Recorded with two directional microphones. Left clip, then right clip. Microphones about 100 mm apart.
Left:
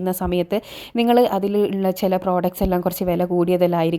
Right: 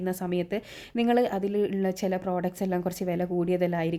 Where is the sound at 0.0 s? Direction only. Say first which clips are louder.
Left 8 dB; 55° left (ahead or behind).